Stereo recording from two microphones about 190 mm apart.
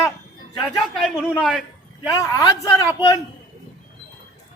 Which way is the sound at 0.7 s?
Centre (ahead or behind).